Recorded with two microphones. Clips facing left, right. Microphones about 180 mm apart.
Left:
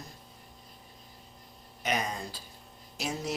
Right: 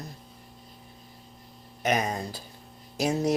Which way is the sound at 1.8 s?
50° right (ahead or behind).